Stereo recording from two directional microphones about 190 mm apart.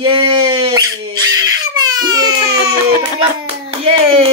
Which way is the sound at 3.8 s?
30° right (ahead or behind).